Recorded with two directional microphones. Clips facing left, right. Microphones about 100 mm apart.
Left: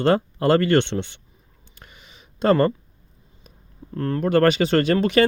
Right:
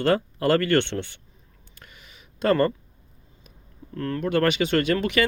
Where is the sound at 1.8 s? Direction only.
25° left (ahead or behind).